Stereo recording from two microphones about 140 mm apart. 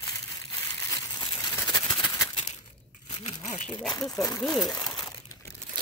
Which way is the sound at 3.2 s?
55° left (ahead or behind).